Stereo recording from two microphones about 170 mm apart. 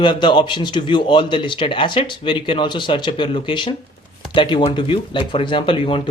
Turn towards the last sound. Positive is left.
turn(degrees=30)  # may be behind; listen again after turning